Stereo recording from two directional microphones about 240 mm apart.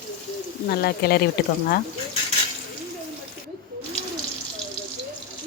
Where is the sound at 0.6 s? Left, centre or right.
Left.